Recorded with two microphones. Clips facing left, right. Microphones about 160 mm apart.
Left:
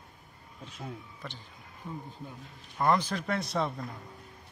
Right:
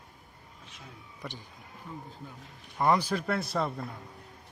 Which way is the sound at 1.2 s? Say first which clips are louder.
Right 3 dB; 10° right (ahead or behind).